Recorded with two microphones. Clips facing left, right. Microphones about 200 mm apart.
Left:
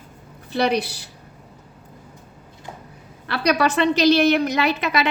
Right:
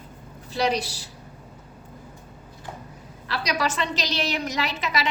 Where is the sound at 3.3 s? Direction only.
60° left (ahead or behind).